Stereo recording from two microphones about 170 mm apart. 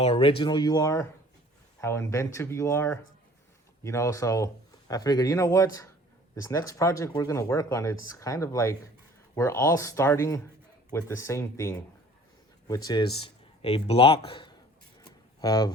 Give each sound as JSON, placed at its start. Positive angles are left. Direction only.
{"t": 0.0, "sound": "speech", "side_deg": 35}
{"t": 13.6, "sound": "speech", "side_deg": 35}